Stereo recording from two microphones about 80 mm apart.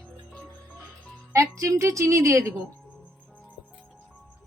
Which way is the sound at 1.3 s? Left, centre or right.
Right.